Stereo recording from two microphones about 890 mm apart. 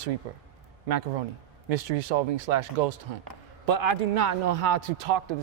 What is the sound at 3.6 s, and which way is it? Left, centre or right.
A man's voice, right.